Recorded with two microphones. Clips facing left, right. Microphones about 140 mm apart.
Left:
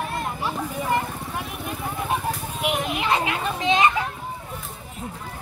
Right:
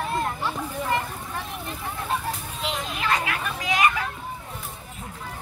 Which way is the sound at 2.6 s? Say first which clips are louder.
Left 4 dB; 15° left (ahead or behind).